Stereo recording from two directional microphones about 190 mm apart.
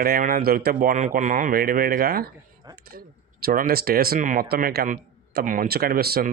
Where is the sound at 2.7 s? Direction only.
20° right (ahead or behind).